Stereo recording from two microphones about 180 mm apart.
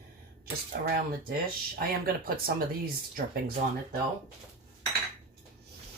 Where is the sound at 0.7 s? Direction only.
55° right (ahead or behind).